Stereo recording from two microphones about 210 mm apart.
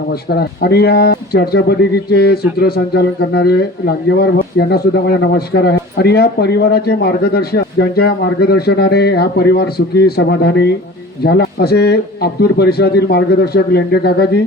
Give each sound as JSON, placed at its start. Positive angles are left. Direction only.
{"t": 0.1, "sound": "speech", "side_deg": 50}